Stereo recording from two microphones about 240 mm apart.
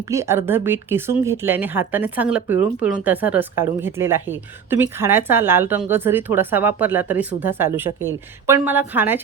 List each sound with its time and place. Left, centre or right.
0.0 s speech: centre